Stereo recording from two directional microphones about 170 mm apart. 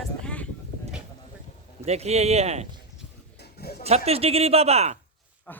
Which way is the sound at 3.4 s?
70° left (ahead or behind).